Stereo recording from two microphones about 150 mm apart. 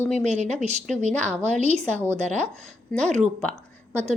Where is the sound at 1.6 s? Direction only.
45° right (ahead or behind).